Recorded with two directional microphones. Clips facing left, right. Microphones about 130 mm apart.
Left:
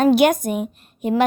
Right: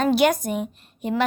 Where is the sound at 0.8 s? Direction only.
50° left (ahead or behind).